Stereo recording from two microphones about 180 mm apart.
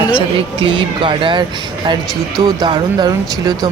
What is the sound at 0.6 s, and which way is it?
Speech, 25° right (ahead or behind).